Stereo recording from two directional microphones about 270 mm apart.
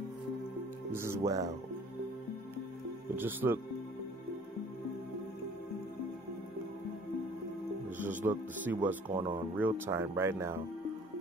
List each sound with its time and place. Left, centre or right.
0.9 s speech: centre
3.2 s speech: centre
8.0 s speech: centre
9.1 s speech: centre